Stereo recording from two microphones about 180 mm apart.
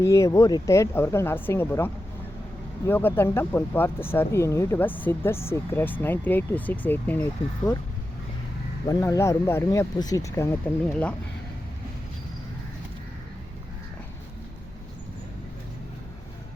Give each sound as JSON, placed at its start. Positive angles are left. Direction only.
{"t": 0.0, "sound": "speech", "side_deg": 15}
{"t": 8.9, "sound": "speech", "side_deg": 20}